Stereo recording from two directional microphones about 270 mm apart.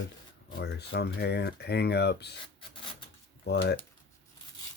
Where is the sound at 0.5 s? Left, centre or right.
Left.